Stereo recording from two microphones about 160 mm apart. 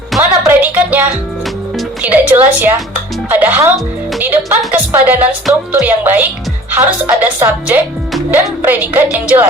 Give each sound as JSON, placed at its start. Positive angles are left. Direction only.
{"t": 0.2, "sound": "music", "side_deg": -10}
{"t": 2.0, "sound": "a woman's voice", "side_deg": -10}